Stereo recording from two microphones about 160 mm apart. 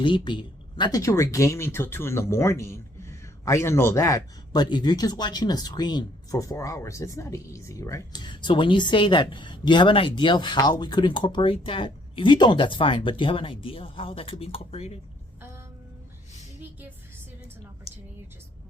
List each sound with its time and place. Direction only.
0.0 s speech: 30° left (ahead or behind)